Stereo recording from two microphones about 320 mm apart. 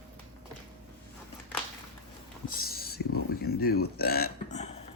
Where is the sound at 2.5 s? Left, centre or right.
Left.